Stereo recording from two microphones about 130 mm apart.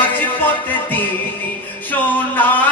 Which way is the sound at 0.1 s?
15° left (ahead or behind).